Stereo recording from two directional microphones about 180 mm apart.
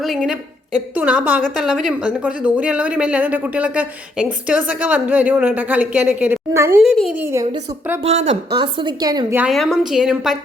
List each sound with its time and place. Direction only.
0.0 s a woman's voice: centre (ahead or behind)
6.8 s a woman's voice: centre (ahead or behind)
8.0 s a woman's voice: 35° right (ahead or behind)
9.4 s a woman's voice: centre (ahead or behind)